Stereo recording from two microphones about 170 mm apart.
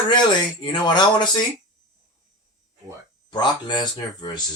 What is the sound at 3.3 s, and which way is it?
Speech, 25° left (ahead or behind).